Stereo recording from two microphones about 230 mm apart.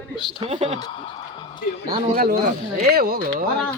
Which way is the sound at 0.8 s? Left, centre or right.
Centre.